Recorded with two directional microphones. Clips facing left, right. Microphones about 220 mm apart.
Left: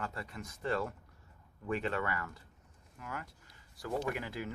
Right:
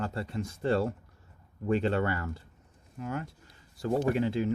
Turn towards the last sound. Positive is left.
turn(degrees=-30)  # may be behind; listen again after turning